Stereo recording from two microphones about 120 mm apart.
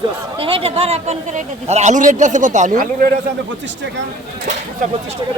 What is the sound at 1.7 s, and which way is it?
A man's voice, 80° right.